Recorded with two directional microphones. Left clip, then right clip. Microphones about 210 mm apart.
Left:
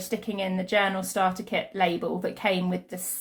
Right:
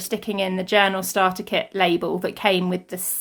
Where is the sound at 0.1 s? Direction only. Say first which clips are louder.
Right 6 dB; 35° right (ahead or behind).